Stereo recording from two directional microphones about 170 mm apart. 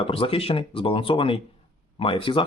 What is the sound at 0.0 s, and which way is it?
Speech, 35° left (ahead or behind).